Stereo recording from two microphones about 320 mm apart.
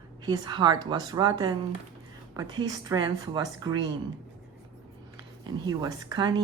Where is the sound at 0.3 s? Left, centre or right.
Centre.